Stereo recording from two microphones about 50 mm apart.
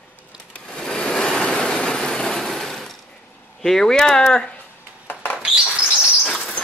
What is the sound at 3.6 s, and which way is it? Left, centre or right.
Speech, centre.